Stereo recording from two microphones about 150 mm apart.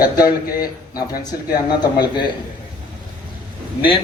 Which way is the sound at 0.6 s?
25° left (ahead or behind).